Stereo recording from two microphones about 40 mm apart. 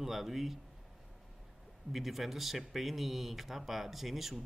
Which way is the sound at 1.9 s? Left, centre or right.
Centre.